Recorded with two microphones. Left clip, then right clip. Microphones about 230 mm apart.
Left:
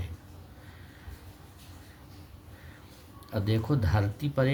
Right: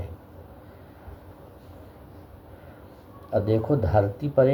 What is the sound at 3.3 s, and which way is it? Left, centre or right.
Speech, left.